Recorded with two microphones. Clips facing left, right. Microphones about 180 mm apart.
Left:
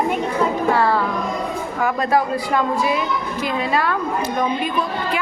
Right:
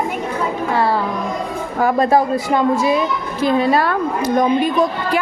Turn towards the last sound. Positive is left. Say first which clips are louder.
# right 5 dB
turn(degrees=-40)  # may be behind; listen again after turning